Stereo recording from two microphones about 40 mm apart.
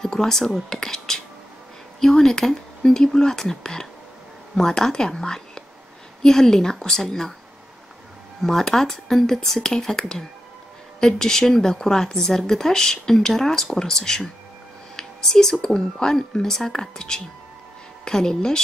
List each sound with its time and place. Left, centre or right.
0.0 s speech: centre
8.4 s speech: centre
15.0 s a sound: centre
15.6 s speech: centre